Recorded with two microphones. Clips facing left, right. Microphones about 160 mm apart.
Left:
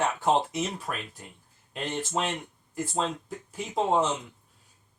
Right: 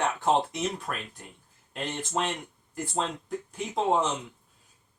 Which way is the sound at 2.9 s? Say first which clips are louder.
Right 1 dB; 5° left (ahead or behind).